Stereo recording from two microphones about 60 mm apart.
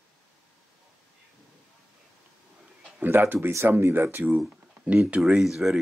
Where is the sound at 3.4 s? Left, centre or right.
Right.